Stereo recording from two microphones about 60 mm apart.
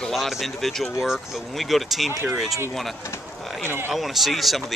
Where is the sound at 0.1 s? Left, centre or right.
Centre.